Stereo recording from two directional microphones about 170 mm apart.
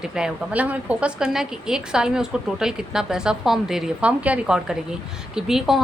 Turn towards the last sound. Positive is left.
turn(degrees=0)  # may be behind; listen again after turning